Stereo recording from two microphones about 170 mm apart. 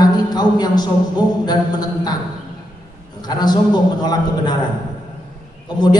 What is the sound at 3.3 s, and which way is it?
A man's voice, 25° left (ahead or behind).